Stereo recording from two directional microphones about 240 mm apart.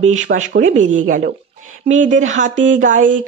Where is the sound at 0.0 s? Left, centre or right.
Right.